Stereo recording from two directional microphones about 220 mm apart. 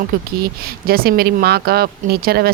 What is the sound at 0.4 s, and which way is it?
Speech, 45° right (ahead or behind).